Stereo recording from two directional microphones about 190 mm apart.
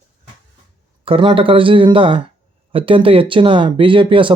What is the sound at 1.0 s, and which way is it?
A man's voice, 25° right (ahead or behind).